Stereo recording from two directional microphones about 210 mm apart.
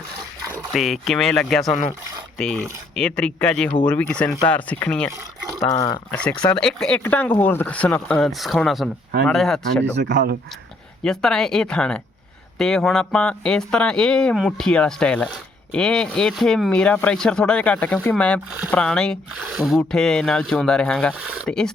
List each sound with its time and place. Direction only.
0.7 s speech: centre (ahead or behind)
10.0 s speech: 55° right (ahead or behind)
11.0 s speech: 5° left (ahead or behind)